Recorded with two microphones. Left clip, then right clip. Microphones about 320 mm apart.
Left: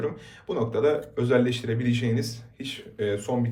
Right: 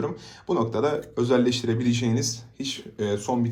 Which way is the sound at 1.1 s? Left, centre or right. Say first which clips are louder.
Right 1 dB; centre.